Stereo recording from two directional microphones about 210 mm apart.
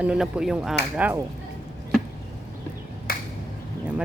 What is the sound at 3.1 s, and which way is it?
Finger snapping, 45° left (ahead or behind).